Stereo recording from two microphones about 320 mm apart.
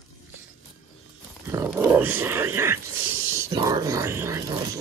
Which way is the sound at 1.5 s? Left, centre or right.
Centre.